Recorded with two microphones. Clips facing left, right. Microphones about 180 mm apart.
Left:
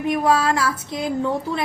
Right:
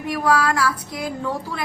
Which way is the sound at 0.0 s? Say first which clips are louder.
Left 1 dB; 20° left (ahead or behind).